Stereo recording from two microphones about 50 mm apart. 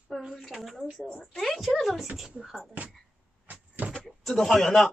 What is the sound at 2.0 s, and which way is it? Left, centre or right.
Speech, centre.